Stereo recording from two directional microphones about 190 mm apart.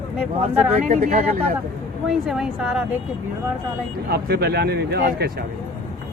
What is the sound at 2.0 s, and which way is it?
Speech, centre (ahead or behind).